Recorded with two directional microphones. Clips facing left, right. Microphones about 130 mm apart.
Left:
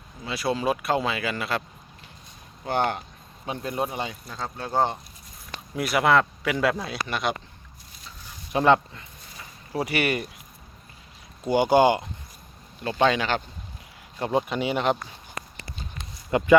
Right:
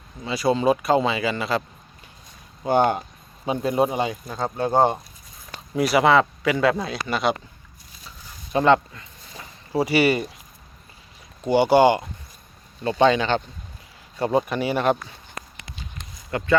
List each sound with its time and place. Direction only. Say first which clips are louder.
0.3 s speech: right 5 dB; centre (ahead or behind)
2.6 s speech: right 6 dB; 15° right (ahead or behind)
4.7 s speech: right 5 dB; 50° right (ahead or behind)
5.7 s speech: right 4 dB; centre (ahead or behind)
8.5 s speech: right 2 dB; 15° left (ahead or behind)
9.7 s speech: right 6 dB; centre (ahead or behind)
13.0 s speech: right 4 dB; 5° left (ahead or behind)
14.5 s speech: right 3 dB; 10° left (ahead or behind)
16.3 s speech: left 4 dB; 20° left (ahead or behind)